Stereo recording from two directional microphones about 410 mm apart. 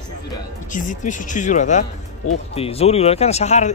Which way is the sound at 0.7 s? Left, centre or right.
Centre.